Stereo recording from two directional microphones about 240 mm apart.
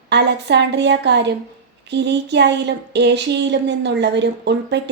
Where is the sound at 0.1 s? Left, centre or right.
Right.